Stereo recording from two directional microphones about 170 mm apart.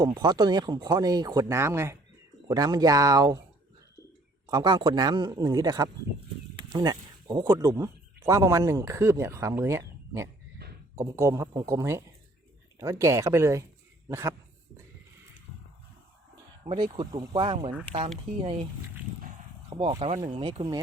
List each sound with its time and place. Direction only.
0.0 s speech: 25° right (ahead or behind)
4.4 s speech: 25° right (ahead or behind)
10.6 s a sound: 75° right (ahead or behind)
10.9 s speech: 15° right (ahead or behind)
16.6 s speech: 30° right (ahead or behind)
19.7 s speech: 25° right (ahead or behind)